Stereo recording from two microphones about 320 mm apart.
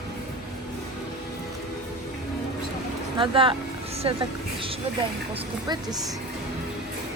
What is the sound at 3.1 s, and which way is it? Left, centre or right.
A woman's voice, centre.